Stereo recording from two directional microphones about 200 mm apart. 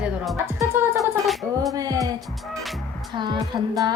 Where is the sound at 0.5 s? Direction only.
10° right (ahead or behind).